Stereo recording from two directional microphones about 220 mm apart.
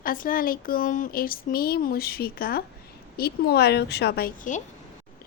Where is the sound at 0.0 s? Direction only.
40° left (ahead or behind).